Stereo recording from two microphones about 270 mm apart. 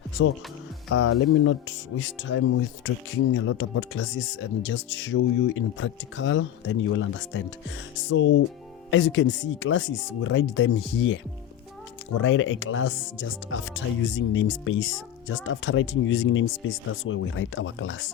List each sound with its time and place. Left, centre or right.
0.9 s speech: left